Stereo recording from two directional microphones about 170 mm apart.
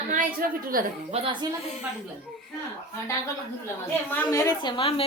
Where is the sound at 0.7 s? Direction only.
55° right (ahead or behind).